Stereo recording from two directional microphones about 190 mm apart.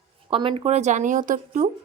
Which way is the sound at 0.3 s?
25° right (ahead or behind).